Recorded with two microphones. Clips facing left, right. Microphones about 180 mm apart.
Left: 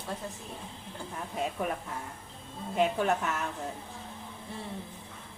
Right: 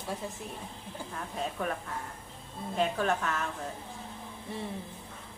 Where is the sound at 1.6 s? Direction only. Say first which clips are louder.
Even; 5° left (ahead or behind).